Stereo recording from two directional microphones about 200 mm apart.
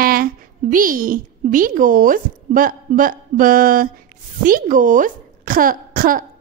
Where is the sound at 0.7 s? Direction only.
45° right (ahead or behind).